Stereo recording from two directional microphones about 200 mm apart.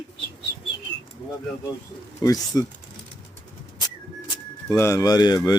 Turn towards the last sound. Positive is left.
turn(degrees=20)  # may be behind; listen again after turning